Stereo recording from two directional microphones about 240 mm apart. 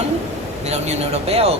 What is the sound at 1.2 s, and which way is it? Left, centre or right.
Speech, right.